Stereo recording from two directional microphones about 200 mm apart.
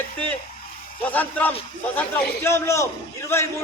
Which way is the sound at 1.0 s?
10° left (ahead or behind).